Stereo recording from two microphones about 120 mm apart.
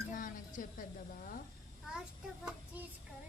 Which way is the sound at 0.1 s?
90° left.